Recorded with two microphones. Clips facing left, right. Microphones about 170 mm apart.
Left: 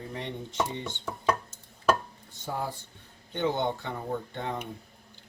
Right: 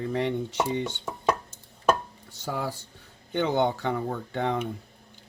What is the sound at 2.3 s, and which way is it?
Speech, 85° right.